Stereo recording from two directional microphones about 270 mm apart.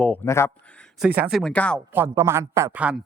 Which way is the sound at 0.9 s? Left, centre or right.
Centre.